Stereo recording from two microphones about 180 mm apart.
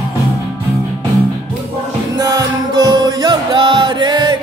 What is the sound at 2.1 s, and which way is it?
Music, 20° right (ahead or behind).